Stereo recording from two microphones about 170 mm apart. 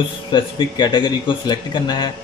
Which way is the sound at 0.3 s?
25° left (ahead or behind).